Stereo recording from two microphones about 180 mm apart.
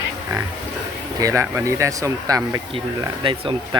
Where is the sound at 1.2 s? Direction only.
20° right (ahead or behind).